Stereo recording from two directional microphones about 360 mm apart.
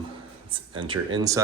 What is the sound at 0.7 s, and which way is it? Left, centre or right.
Speech, centre.